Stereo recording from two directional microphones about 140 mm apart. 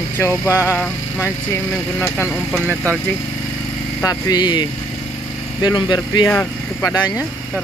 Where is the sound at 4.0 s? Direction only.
25° left (ahead or behind).